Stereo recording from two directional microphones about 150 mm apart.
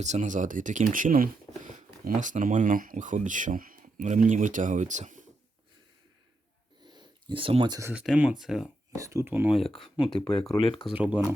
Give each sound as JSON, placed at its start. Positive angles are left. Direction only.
{"t": 0.0, "sound": "speech", "side_deg": -55}
{"t": 6.8, "sound": "a sound", "side_deg": -30}
{"t": 7.9, "sound": "speech", "side_deg": -5}
{"t": 9.0, "sound": "speech", "side_deg": -20}
{"t": 9.6, "sound": "speech", "side_deg": 0}
{"t": 10.6, "sound": "speech", "side_deg": 35}
{"t": 10.8, "sound": "speech", "side_deg": -10}